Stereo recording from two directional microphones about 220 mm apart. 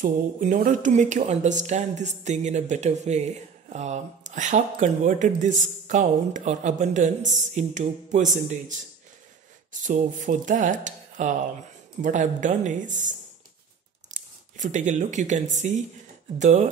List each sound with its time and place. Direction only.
0.0 s speech: 35° right (ahead or behind)
14.1 s speech: 35° right (ahead or behind)